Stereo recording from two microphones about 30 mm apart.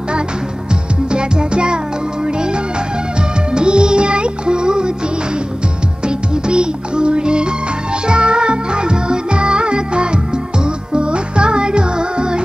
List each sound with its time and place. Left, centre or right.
1.1 s music: right
6.0 s music: right